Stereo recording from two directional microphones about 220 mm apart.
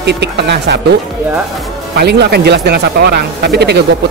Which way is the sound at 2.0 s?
50° right (ahead or behind).